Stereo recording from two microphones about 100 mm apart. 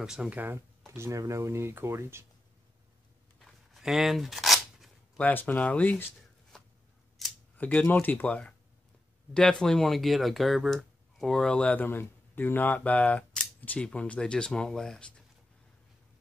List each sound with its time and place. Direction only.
0.0 s speech: 5° right (ahead or behind)
0.4 s speech: 25° right (ahead or behind)
3.3 s a sound: centre (ahead or behind)
5.2 s speech: 20° left (ahead or behind)
7.2 s camera: centre (ahead or behind)
7.5 s speech: 15° left (ahead or behind)